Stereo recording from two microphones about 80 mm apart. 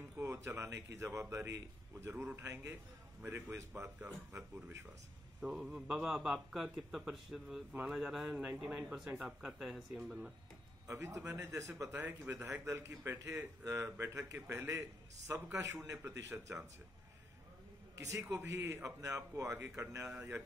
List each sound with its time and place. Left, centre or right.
0.2 s speech: right
3.2 s a man's voice: right
5.4 s a man's voice: centre
10.9 s speech: right
18.0 s a man's voice: right